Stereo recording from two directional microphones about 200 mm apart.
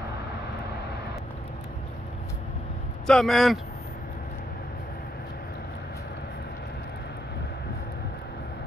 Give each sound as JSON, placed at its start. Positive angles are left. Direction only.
{"t": 3.1, "sound": "speech", "side_deg": 0}